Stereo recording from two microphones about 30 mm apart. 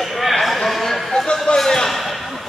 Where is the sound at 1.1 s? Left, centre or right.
Left.